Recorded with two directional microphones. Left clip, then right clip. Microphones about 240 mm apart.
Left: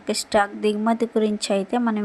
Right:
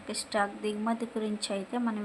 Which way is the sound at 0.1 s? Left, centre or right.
Left.